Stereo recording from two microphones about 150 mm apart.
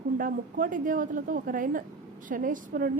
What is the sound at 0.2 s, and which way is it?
A woman's voice, 65° right (ahead or behind).